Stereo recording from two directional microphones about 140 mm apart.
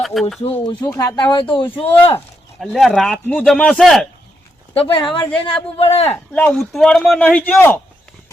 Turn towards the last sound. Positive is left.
turn(degrees=15)  # may be behind; listen again after turning